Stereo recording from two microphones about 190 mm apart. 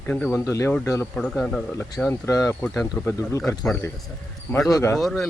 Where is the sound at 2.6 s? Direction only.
Centre (ahead or behind).